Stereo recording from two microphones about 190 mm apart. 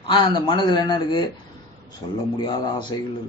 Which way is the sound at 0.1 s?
25° left (ahead or behind).